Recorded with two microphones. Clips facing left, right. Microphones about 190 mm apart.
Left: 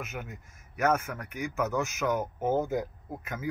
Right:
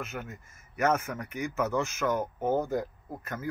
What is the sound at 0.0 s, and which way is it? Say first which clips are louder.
Speech: right 1 dB; 5° left (ahead or behind).